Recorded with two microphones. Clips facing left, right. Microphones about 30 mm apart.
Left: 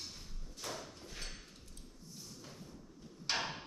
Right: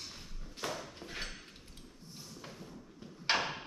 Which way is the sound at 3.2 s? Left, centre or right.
Right.